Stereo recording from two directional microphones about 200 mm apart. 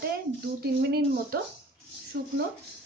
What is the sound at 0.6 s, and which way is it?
Speech, 50° right (ahead or behind).